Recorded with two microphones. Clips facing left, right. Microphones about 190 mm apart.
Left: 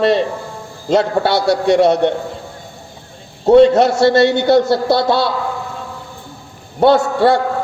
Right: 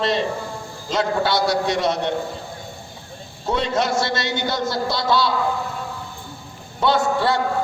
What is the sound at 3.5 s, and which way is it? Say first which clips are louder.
A man's voice: left 13 dB; 60° left (ahead or behind).